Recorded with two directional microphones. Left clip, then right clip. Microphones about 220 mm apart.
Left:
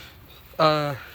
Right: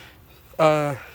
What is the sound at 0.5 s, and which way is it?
Speech, 20° right (ahead or behind).